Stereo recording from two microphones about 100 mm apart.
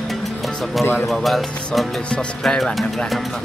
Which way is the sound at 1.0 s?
Centre (ahead or behind).